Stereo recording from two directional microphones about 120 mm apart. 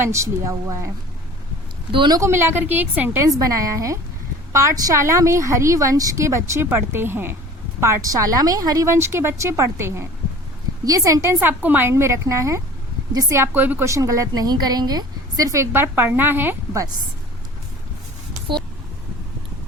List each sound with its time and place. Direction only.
0.0 s a woman's voice: 25° right (ahead or behind)
1.9 s speech: 45° right (ahead or behind)
2.1 s a woman's voice: 20° right (ahead or behind)
3.2 s a woman's voice: 30° right (ahead or behind)